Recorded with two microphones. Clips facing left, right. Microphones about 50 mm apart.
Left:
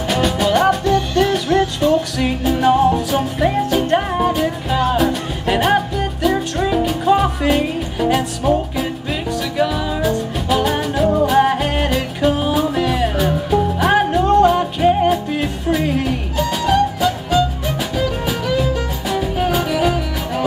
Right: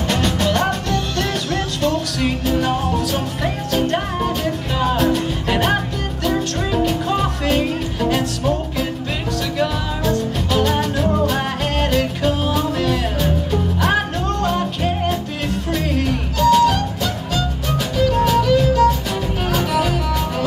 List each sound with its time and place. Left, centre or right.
0.1 s music: centre
4.9 s music: centre